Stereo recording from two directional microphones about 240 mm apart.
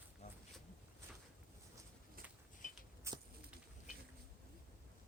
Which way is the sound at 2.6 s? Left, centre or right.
Left.